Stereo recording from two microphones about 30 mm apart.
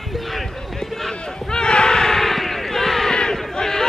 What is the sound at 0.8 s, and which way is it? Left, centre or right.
Run, centre.